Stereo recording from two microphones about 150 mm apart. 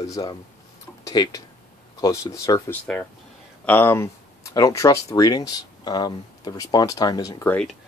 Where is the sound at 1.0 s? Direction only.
25° left (ahead or behind).